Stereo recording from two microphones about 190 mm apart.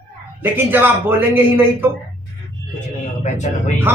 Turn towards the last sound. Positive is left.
turn(degrees=40)  # may be behind; listen again after turning